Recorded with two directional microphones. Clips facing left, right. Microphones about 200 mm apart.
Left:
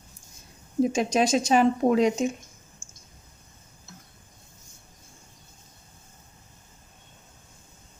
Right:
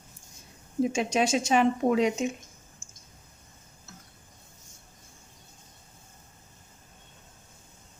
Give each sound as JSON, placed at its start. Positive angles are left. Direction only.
{"t": 0.8, "sound": "a woman's voice", "side_deg": 40}